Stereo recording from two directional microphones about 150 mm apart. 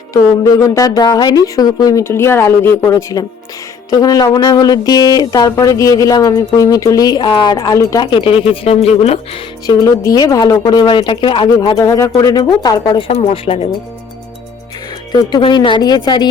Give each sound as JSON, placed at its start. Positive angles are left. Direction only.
{"t": 0.1, "sound": "speech", "side_deg": 20}
{"t": 8.0, "sound": "speech", "side_deg": 35}
{"t": 9.6, "sound": "speech", "side_deg": 25}
{"t": 11.8, "sound": "speech", "side_deg": 20}
{"t": 13.1, "sound": "speech", "side_deg": 40}
{"t": 15.1, "sound": "speech", "side_deg": 30}